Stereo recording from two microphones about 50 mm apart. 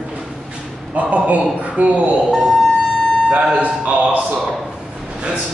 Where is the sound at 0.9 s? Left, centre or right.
Right.